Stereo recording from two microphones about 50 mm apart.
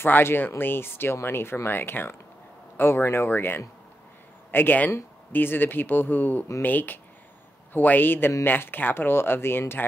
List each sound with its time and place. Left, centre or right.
0.0 s speech: left